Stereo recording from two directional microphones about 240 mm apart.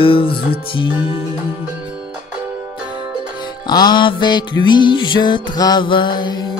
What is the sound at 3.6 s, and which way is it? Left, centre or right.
Music, centre.